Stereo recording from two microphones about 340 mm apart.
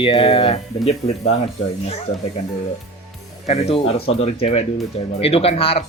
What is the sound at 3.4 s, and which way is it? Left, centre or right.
Speech, centre.